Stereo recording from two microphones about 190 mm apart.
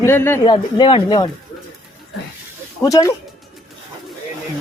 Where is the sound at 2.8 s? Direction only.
20° left (ahead or behind).